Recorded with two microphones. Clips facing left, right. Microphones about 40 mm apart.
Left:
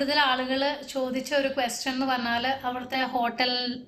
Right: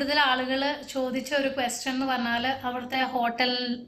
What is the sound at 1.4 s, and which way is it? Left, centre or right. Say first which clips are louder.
A woman's voice: even; right.